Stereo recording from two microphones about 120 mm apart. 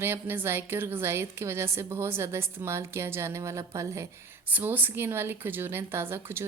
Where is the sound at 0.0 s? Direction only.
20° right (ahead or behind).